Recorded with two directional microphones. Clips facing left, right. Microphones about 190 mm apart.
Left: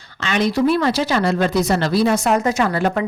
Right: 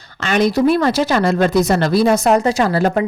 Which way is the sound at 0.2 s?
45° right (ahead or behind).